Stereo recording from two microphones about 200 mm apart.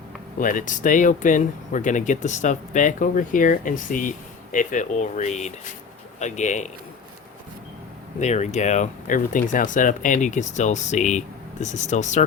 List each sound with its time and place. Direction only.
0.3 s speech: 40° left (ahead or behind)
8.2 s speech: 35° left (ahead or behind)